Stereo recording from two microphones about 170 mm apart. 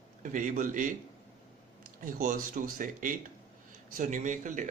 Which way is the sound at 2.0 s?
50° right (ahead or behind).